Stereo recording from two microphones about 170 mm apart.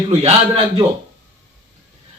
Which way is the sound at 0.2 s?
35° right (ahead or behind).